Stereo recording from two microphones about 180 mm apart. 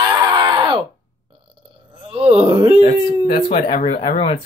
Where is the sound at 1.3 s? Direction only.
30° right (ahead or behind).